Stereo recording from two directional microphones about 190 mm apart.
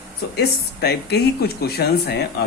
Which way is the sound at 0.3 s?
60° left (ahead or behind).